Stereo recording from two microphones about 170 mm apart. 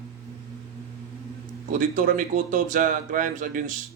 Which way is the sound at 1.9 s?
50° right (ahead or behind).